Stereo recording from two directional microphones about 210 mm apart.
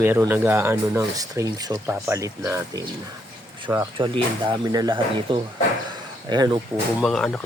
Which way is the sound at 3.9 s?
25° right (ahead or behind).